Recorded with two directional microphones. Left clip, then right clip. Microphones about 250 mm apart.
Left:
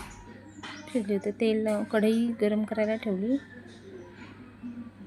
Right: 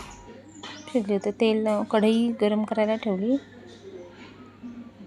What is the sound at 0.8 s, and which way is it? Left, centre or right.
A woman's voice, centre.